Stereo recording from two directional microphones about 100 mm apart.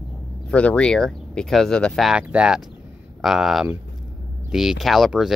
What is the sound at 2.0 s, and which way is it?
Speech, 10° right (ahead or behind).